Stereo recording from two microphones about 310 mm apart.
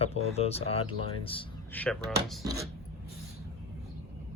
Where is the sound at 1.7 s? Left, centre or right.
Centre.